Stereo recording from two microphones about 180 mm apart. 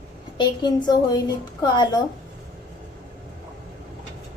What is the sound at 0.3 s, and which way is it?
Speech, 25° left (ahead or behind).